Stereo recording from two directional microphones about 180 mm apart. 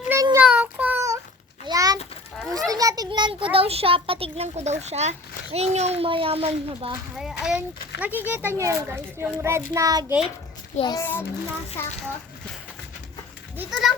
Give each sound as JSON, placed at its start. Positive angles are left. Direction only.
{"t": 0.1, "sound": "child singing", "side_deg": -15}
{"t": 1.6, "sound": "a sound", "side_deg": -20}
{"t": 2.5, "sound": "a child's voice", "side_deg": -20}
{"t": 7.2, "sound": "a child's voice", "side_deg": -5}
{"t": 10.8, "sound": "a child's voice", "side_deg": 25}
{"t": 11.0, "sound": "a child's voice", "side_deg": 10}
{"t": 13.6, "sound": "a child's voice", "side_deg": 0}